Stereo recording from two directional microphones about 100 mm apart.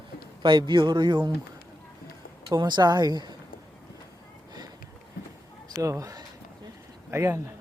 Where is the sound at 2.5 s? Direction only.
45° right (ahead or behind).